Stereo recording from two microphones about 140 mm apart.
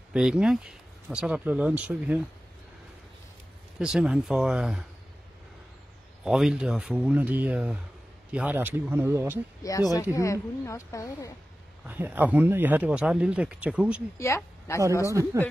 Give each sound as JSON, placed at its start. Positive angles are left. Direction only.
{"t": 0.1, "sound": "speech", "side_deg": -5}
{"t": 3.8, "sound": "speech", "side_deg": -5}
{"t": 6.2, "sound": "speech", "side_deg": -5}
{"t": 9.6, "sound": "a woman's voice", "side_deg": 25}
{"t": 11.8, "sound": "speech", "side_deg": -10}
{"t": 14.1, "sound": "speech", "side_deg": 20}
{"t": 15.0, "sound": "speech", "side_deg": -20}